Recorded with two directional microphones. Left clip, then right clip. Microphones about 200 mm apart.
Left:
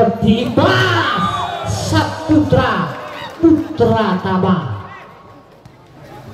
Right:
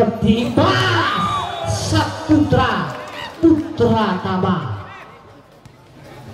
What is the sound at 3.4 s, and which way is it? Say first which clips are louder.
A man's voice: left 2 dB; 10° right (ahead or behind).